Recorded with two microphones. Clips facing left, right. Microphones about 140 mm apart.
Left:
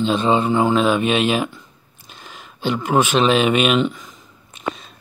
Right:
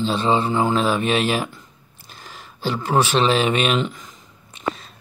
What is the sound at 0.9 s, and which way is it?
Speech, centre (ahead or behind).